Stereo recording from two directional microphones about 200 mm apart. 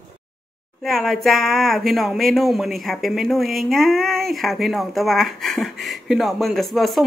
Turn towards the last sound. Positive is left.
turn(degrees=0)  # may be behind; listen again after turning